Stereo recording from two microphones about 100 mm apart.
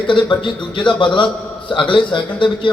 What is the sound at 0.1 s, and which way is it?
A man's voice, 55° left (ahead or behind).